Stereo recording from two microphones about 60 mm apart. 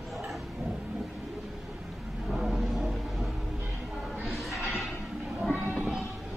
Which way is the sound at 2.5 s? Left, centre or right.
Centre.